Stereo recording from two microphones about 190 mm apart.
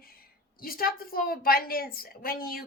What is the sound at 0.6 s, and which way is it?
A woman's voice, 50° left (ahead or behind).